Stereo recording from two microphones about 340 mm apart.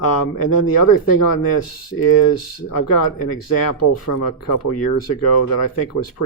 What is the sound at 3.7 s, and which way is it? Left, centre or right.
Speech, left.